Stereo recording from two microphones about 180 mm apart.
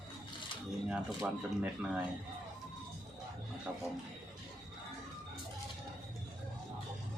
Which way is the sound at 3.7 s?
10° right (ahead or behind).